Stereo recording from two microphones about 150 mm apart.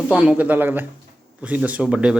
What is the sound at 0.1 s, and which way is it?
Speech, 10° right (ahead or behind).